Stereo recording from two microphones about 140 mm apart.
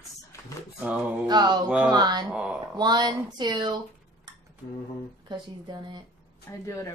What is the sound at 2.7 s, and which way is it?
Speech, 30° right (ahead or behind).